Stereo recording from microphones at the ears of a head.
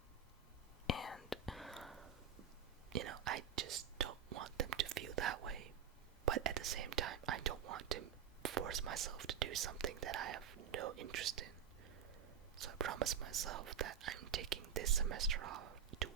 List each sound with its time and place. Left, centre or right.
1.3 s whispering: centre
2.9 s whispering: right
12.5 s speech: right